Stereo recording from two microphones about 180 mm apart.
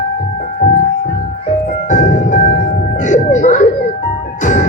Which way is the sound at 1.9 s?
45° left (ahead or behind).